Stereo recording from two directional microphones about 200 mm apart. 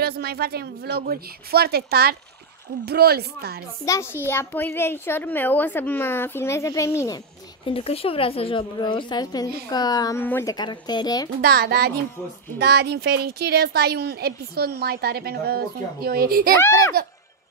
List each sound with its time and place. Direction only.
0.0 s a woman's voice: 50° right (ahead or behind)
3.8 s a woman's voice: 15° left (ahead or behind)
7.6 s a woman's voice: 30° left (ahead or behind); by 10.5 s 10° left (ahead or behind)
10.5 s a woman's voice: 20° left (ahead or behind)
11.4 s a woman's voice: 50° right (ahead or behind)
16.5 s a woman's voice: 15° left (ahead or behind)